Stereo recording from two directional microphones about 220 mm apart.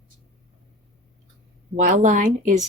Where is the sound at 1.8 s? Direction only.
35° right (ahead or behind).